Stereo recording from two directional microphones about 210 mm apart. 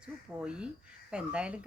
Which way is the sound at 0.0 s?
5° right (ahead or behind).